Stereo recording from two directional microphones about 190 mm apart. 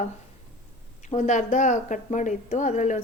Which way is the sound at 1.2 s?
40° left (ahead or behind).